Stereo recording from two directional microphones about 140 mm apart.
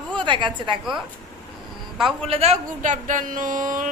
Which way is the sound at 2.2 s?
45° right (ahead or behind).